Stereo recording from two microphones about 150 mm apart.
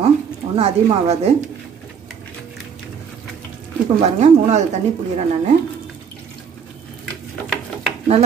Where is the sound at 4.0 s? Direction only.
45° right (ahead or behind).